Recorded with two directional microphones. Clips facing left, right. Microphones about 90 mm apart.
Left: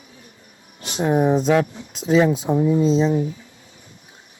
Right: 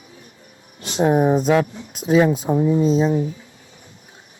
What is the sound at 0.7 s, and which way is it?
Speech, 35° right (ahead or behind).